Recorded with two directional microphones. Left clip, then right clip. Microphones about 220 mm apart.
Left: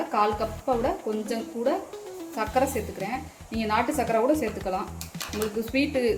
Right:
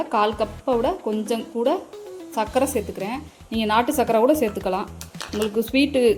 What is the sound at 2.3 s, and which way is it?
Speech, 40° right (ahead or behind).